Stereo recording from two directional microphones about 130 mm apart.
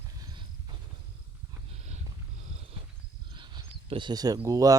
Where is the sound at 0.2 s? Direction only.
35° right (ahead or behind).